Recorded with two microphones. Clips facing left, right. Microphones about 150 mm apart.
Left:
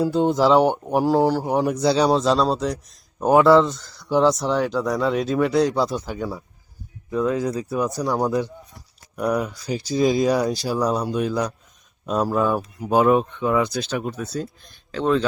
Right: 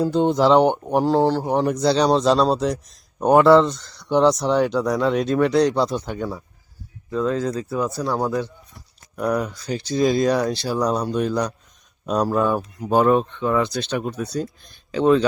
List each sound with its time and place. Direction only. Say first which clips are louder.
0.0 s a man's voice: right 1 dB; 5° left (ahead or behind)
9.1 s a man's voice: even; 5° left (ahead or behind)